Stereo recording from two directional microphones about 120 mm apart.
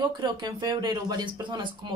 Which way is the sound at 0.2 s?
35° right (ahead or behind).